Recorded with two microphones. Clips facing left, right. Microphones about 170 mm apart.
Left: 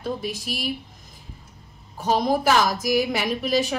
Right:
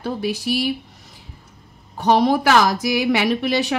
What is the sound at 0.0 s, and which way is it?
Speech, 70° right (ahead or behind).